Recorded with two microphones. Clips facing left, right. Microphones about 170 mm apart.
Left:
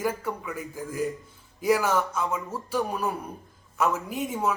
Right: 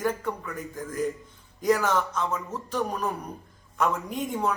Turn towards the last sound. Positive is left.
turn(degrees=5)  # may be behind; listen again after turning